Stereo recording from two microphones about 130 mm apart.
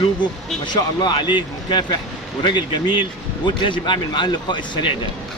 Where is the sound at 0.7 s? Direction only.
35° left (ahead or behind).